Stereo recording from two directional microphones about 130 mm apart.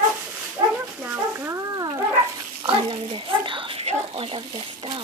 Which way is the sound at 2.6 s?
40° right (ahead or behind).